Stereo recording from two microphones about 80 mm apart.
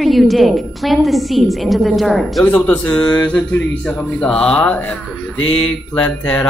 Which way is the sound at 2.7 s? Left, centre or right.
Centre.